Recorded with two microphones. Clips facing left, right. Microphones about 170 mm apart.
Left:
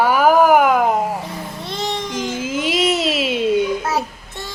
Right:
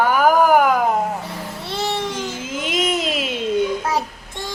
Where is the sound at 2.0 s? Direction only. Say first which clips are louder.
Left 3 dB; 10° left (ahead or behind).